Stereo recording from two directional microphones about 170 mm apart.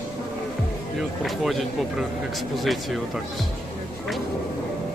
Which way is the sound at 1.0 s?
Centre (ahead or behind).